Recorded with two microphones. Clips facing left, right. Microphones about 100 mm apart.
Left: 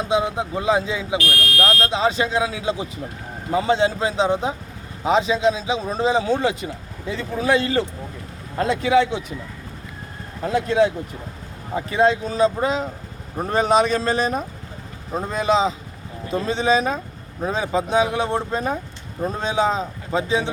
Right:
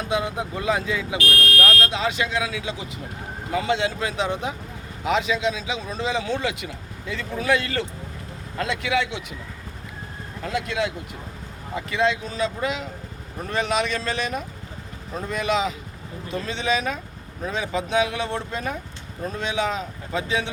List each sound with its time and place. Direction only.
0.0 s speech: 25° left (ahead or behind)
10.4 s speech: 35° left (ahead or behind)